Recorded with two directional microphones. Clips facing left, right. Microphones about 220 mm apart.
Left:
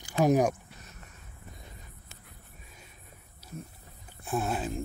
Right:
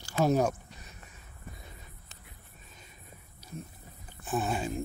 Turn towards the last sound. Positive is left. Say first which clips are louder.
# even
turn(degrees=0)  # may be behind; listen again after turning